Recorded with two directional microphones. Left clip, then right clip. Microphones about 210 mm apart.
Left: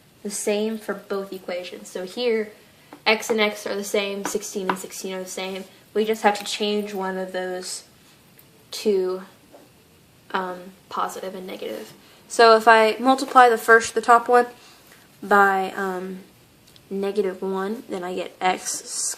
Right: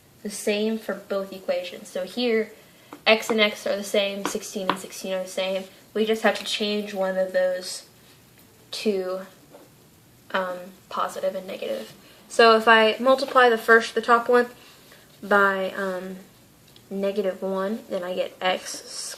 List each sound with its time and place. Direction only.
0.3 s speech: 45° left (ahead or behind)
8.7 s speech: 45° left (ahead or behind)
10.8 s speech: 45° left (ahead or behind)
17.0 s speech: 45° left (ahead or behind)